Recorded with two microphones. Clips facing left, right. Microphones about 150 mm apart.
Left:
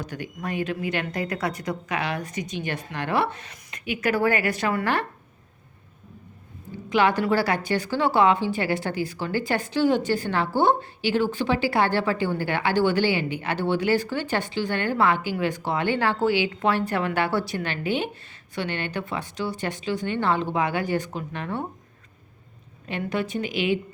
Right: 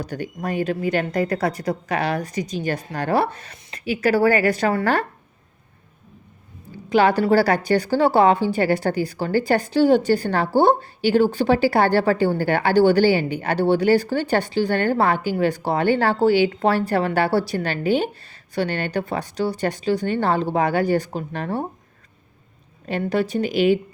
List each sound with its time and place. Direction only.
0.0 s speech: 35° right (ahead or behind)
6.9 s speech: 35° right (ahead or behind)
22.9 s speech: 35° right (ahead or behind)